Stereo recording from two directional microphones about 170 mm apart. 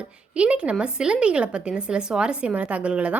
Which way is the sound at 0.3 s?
5° right (ahead or behind).